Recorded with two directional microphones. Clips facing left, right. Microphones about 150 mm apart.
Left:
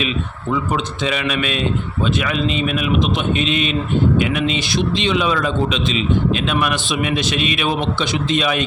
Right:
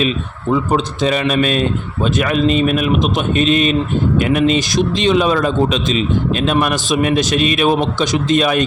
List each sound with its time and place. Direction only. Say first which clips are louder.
0.5 s a man's voice: right 5 dB; 40° right (ahead or behind)